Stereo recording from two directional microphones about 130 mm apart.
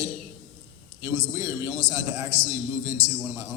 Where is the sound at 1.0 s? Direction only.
25° right (ahead or behind).